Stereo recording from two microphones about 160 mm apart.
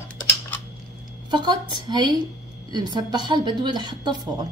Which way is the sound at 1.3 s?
30° right (ahead or behind).